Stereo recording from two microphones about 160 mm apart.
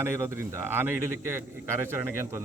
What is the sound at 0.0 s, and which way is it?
Speech, 15° right (ahead or behind).